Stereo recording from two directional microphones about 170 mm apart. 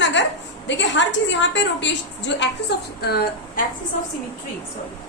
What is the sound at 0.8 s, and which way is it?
A woman's voice, 90° left.